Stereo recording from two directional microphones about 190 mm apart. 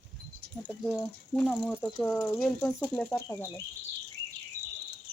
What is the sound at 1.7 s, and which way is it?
Speech, 10° left (ahead or behind).